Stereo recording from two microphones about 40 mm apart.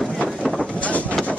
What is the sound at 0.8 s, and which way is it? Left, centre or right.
Vehicle, left.